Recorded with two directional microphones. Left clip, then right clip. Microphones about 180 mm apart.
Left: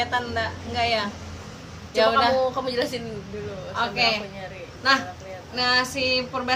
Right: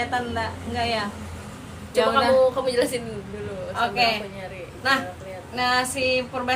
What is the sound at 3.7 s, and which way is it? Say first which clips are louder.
Speech: right 1 dB; 10° left (ahead or behind).